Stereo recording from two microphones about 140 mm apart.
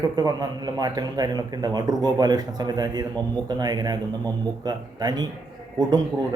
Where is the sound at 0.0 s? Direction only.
30° right (ahead or behind).